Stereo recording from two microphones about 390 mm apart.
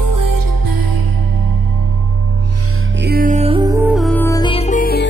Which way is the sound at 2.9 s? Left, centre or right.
Right.